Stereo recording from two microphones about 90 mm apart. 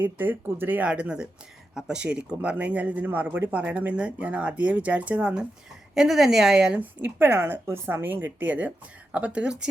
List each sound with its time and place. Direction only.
0.0 s speech: 20° right (ahead or behind)
7.0 s a woman's voice: 25° right (ahead or behind)